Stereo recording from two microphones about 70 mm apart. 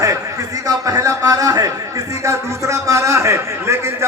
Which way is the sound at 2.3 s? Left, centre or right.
Right.